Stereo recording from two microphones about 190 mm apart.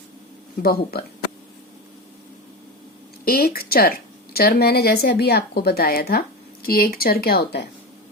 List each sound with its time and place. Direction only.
0.6 s a woman's voice: 55° left (ahead or behind)
3.2 s a woman's voice: 55° left (ahead or behind)